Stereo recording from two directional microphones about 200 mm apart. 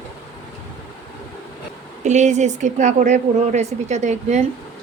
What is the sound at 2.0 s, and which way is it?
A woman's voice, 35° right (ahead or behind).